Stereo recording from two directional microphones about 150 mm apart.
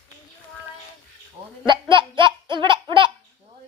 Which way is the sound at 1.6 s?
30° right (ahead or behind).